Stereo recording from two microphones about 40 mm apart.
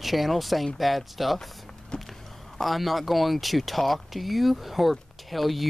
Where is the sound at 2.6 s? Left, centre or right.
Centre.